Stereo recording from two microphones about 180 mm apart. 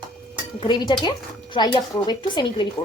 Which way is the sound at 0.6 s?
25° left (ahead or behind).